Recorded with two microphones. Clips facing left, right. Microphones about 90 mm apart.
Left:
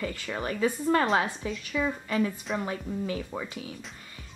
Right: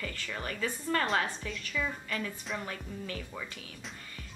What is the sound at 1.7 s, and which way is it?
Speech, 25° left (ahead or behind).